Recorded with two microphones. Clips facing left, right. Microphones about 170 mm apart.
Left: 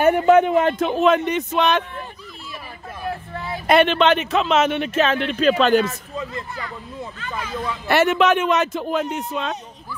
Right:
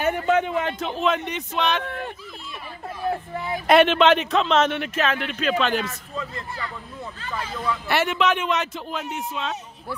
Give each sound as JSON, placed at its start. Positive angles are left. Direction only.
{"t": 0.0, "sound": "speech", "side_deg": 55}
{"t": 3.3, "sound": "speech", "side_deg": -15}
{"t": 3.6, "sound": "speech", "side_deg": 0}
{"t": 4.7, "sound": "speech", "side_deg": 25}
{"t": 5.9, "sound": "a man's voice", "side_deg": 20}
{"t": 7.2, "sound": "speech", "side_deg": -30}
{"t": 7.9, "sound": "speech", "side_deg": 50}